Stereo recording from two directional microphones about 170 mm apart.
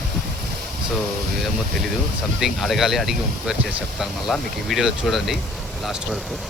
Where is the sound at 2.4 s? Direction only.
Centre (ahead or behind).